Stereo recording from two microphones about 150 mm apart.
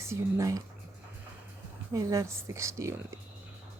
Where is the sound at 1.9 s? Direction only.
20° right (ahead or behind).